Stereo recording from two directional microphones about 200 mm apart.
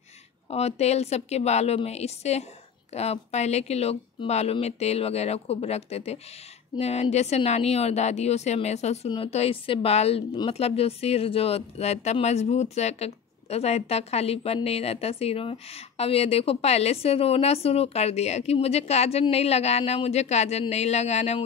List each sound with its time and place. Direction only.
0.5 s a woman's voice: 30° left (ahead or behind)